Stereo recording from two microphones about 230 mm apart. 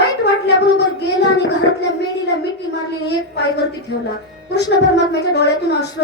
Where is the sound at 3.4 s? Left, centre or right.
Left.